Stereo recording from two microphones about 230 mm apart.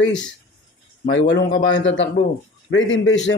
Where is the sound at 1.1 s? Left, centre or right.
Left.